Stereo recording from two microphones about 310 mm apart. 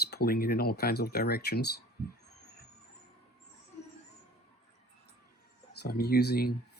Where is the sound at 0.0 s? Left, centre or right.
Left.